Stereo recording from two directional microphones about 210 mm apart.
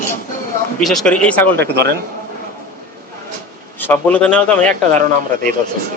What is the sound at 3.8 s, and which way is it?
Speech, 5° left (ahead or behind).